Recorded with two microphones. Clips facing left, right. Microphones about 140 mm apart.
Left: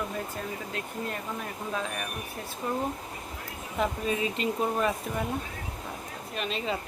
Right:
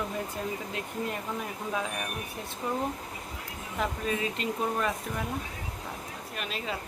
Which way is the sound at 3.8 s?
Centre (ahead or behind).